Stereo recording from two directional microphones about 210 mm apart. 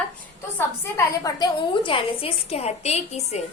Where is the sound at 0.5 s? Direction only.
10° left (ahead or behind); by 3.4 s 30° left (ahead or behind).